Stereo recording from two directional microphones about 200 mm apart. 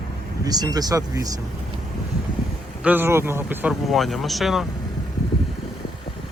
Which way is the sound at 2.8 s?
10° right (ahead or behind).